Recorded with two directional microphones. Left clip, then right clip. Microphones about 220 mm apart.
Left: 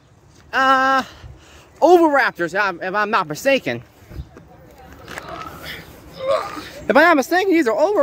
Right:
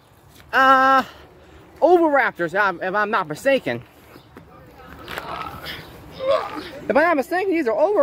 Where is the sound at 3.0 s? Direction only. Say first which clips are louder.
Left 4 dB; 15° left (ahead or behind).